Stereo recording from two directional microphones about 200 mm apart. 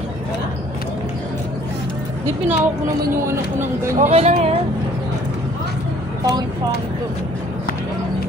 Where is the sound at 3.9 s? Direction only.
35° right (ahead or behind).